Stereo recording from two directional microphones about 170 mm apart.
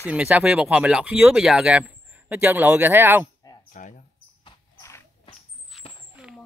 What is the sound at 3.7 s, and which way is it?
Speech, 50° left (ahead or behind).